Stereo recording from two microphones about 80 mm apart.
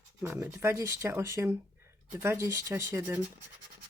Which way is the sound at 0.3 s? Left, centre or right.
Right.